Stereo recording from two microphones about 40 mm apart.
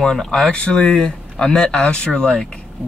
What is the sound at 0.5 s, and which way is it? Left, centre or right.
Speech, left.